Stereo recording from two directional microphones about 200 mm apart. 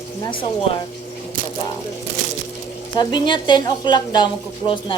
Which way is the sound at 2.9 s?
20° left (ahead or behind).